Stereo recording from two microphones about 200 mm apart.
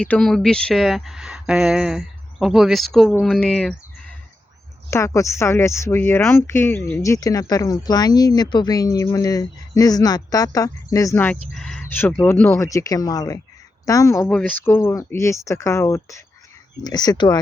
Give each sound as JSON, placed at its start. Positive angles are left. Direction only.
{"t": 0.0, "sound": "speech", "side_deg": 5}
{"t": 4.9, "sound": "speech", "side_deg": 15}